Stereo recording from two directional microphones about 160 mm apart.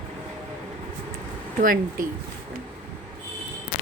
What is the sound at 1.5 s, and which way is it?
Speech, 60° right (ahead or behind).